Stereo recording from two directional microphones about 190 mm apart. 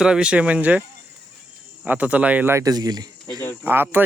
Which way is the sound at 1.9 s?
5° right (ahead or behind).